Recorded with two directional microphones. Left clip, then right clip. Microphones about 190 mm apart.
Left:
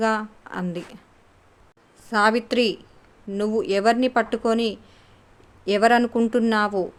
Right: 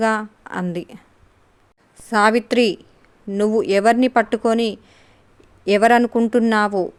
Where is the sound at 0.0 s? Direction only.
45° right (ahead or behind).